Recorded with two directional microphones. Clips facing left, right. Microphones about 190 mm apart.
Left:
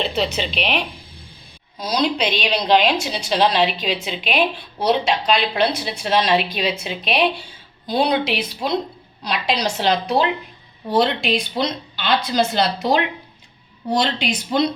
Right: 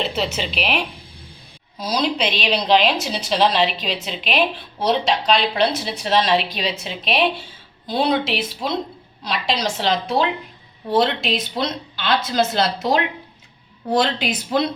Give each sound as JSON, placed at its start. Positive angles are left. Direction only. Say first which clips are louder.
{"t": 0.0, "sound": "a woman's voice", "louder": "left 1 dB", "side_deg": -5}
{"t": 14.0, "sound": "a woman's voice", "louder": "right 1 dB", "side_deg": -5}